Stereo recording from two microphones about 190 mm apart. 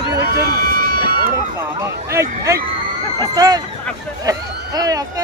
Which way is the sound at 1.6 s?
15° right (ahead or behind).